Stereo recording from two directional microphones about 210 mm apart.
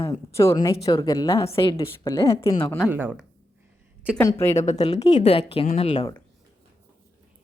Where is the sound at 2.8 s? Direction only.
10° right (ahead or behind).